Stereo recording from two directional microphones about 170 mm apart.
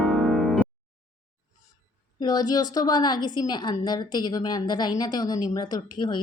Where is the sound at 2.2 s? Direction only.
25° left (ahead or behind).